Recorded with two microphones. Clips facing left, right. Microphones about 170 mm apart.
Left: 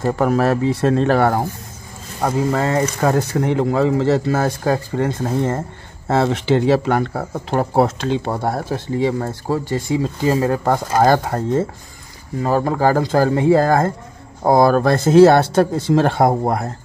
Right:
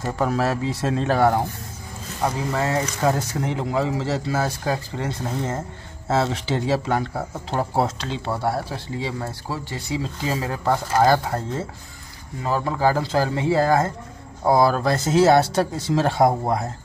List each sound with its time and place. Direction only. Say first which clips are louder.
0.0 s speech: left 6 dB; 60° left (ahead or behind)